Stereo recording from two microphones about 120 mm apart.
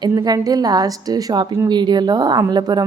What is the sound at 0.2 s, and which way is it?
Speech, 30° right (ahead or behind).